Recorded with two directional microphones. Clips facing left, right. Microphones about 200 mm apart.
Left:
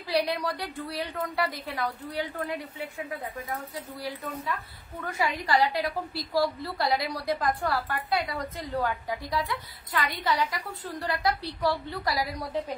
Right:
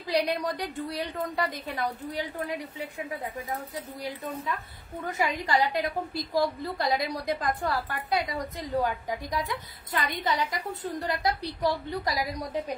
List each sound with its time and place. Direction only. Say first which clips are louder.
0.0 s a woman's voice: even; 20° right (ahead or behind)
5.0 s a woman's voice: even; 20° right (ahead or behind)